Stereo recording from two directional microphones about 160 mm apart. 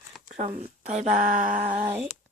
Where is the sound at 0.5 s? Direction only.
45° right (ahead or behind).